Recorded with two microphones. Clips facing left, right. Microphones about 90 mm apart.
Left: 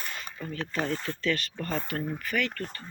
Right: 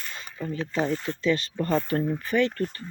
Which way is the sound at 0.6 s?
15° right (ahead or behind).